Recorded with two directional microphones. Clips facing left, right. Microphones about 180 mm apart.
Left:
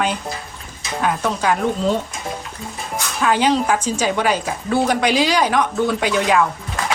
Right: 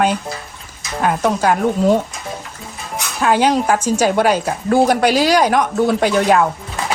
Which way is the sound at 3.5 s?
5° right (ahead or behind).